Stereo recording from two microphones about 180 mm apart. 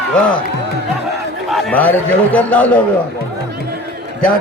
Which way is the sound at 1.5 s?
Centre (ahead or behind).